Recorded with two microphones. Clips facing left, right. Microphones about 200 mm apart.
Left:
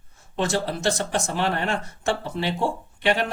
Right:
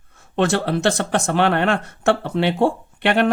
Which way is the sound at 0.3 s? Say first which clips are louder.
Right 6 dB; 65° right (ahead or behind).